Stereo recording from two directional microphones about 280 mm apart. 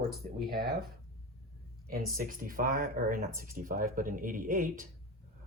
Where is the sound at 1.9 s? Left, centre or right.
Right.